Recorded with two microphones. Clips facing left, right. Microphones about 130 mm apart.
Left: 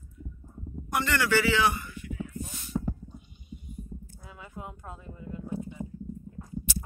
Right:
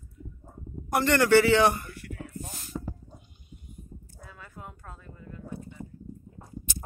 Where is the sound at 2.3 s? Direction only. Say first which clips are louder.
Left 4 dB; 45° right (ahead or behind).